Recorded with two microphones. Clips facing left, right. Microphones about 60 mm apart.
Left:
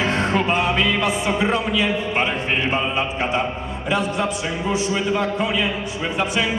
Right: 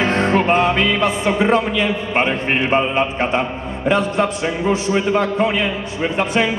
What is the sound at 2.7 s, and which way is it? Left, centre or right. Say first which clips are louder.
Mantra: right 5 dB; right.